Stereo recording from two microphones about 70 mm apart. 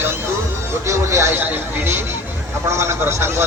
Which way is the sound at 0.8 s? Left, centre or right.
Right.